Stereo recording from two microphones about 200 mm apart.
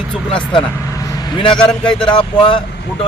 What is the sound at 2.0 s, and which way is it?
Speech, 25° left (ahead or behind).